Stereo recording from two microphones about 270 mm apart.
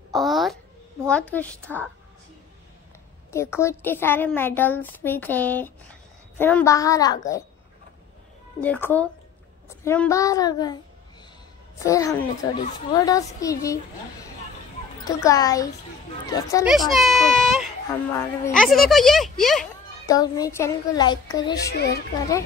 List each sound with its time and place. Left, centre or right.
0.1 s a sound: centre
1.1 s a child's voice: centre
3.3 s a woman's voice: centre
8.5 s a woman's voice: centre
11.8 s a woman's voice: centre
15.0 s a woman's voice: centre
16.6 s a child's voice: centre
20.1 s a woman's voice: centre
21.7 s a woman's voice: left